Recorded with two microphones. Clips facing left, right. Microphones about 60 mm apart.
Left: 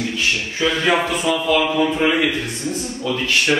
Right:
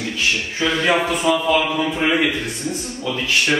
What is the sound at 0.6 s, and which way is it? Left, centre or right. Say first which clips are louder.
Speech: left 1 dB; centre.